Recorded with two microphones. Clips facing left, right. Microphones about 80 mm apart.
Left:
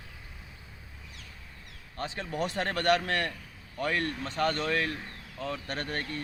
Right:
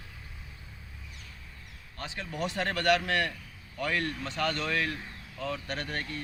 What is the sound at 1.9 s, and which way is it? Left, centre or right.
Speech, left.